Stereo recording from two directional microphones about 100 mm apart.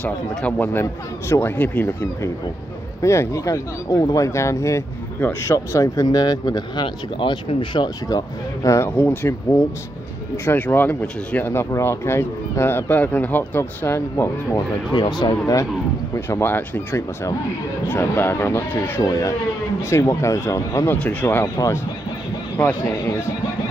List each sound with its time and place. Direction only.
0.0 s speech: 15° left (ahead or behind); by 8.2 s 50° left (ahead or behind)
8.6 s speech: 30° left (ahead or behind)
8.9 s speech: 20° left (ahead or behind)
14.9 s speech: 45° left (ahead or behind)
16.3 s speech: 25° left (ahead or behind)
21.0 s speech: 15° left (ahead or behind)